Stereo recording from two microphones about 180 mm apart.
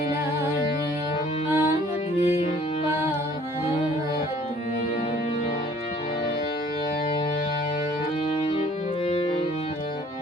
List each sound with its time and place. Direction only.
2.2 s music: 35° left (ahead or behind)